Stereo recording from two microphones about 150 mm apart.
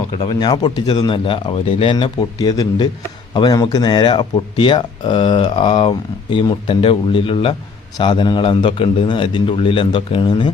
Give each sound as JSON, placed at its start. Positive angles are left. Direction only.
{"t": 0.2, "sound": "speech", "side_deg": 30}